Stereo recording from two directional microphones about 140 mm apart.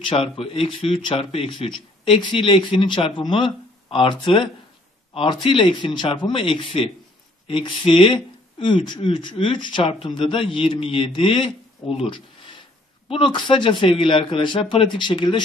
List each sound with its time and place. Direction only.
0.0 s speech: 40° left (ahead or behind)